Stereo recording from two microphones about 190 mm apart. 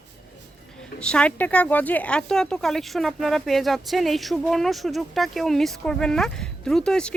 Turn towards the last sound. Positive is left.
turn(degrees=5)  # may be behind; listen again after turning